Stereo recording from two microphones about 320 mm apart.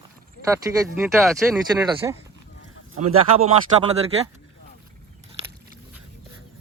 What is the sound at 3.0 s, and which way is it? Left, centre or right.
Speech, right.